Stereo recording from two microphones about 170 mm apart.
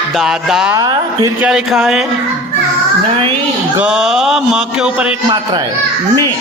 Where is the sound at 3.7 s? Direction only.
5° right (ahead or behind).